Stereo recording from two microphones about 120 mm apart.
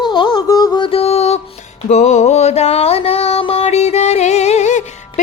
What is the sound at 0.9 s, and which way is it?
Music, 55° left (ahead or behind).